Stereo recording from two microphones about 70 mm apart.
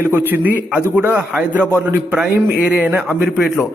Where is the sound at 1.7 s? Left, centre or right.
Right.